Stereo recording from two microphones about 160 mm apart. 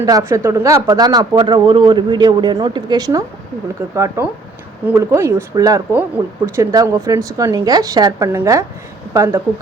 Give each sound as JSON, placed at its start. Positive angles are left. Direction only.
{"t": 0.0, "sound": "speech", "side_deg": -20}